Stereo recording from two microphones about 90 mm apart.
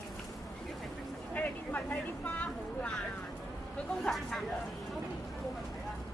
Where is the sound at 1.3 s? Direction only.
15° left (ahead or behind).